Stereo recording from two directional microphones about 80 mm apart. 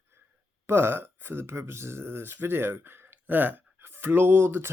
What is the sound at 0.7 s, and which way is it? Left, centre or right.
Speech, right.